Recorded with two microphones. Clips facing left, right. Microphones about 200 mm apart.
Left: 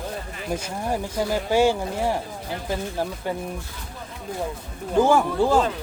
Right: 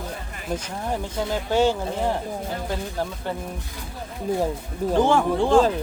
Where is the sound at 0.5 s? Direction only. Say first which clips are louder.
Left 1 dB; 10° left (ahead or behind).